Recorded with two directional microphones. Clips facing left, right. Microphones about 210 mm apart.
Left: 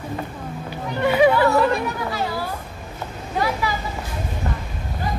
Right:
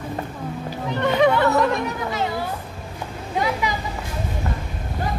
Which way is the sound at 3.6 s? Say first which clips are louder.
Even; 20° right (ahead or behind).